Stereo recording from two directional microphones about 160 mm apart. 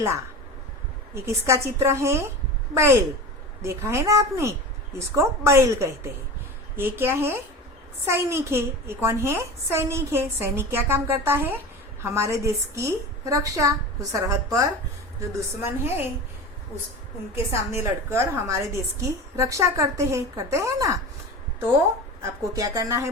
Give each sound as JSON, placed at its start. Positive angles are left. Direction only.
{"t": 1.1, "sound": "a woman's voice", "side_deg": -15}
{"t": 17.3, "sound": "a woman's voice", "side_deg": -15}
{"t": 22.2, "sound": "a woman's voice", "side_deg": -20}